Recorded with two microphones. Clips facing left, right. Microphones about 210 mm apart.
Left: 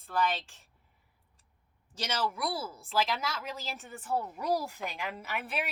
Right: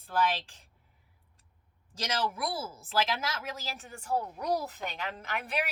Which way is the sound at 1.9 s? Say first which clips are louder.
Right 1 dB; centre (ahead or behind).